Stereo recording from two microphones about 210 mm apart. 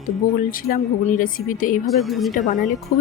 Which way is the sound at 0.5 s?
40° left (ahead or behind).